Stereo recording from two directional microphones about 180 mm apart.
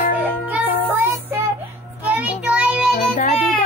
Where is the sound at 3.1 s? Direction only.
45° left (ahead or behind).